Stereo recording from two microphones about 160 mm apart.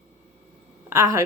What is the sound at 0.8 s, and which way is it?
Speech, 20° right (ahead or behind).